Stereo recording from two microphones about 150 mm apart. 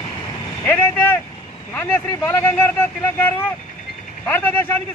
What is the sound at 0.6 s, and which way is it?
Speech, 15° left (ahead or behind).